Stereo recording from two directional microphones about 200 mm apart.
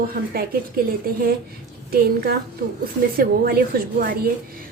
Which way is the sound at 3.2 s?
45° right (ahead or behind).